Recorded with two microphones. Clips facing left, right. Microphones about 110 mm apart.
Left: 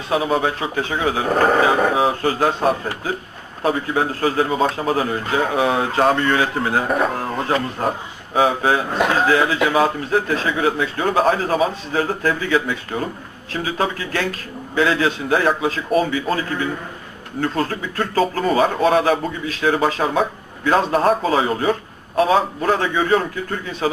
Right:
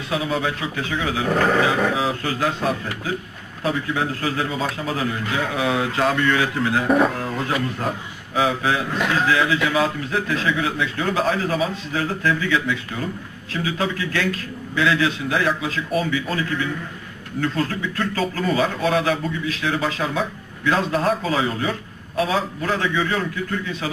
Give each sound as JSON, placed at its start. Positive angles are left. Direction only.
{"t": 0.1, "sound": "speech", "side_deg": 35}
{"t": 6.8, "sound": "speech", "side_deg": 0}
{"t": 7.1, "sound": "a man's voice", "side_deg": 30}